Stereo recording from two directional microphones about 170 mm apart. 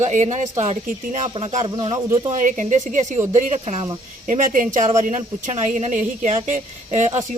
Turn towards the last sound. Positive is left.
turn(degrees=-45)  # may be behind; listen again after turning